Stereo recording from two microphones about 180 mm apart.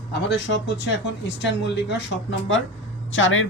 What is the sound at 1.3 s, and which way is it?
Speech, 85° left.